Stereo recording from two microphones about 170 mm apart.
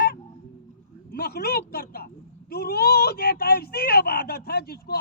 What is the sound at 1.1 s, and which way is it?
Speech, 65° left (ahead or behind).